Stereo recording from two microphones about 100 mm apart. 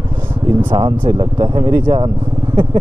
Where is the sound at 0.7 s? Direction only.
55° right (ahead or behind).